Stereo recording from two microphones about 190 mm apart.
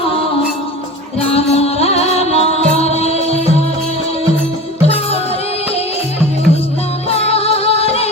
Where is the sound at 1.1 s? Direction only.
30° left (ahead or behind).